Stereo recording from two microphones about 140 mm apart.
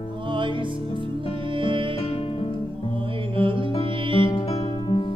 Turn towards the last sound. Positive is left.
turn(degrees=35)  # may be behind; listen again after turning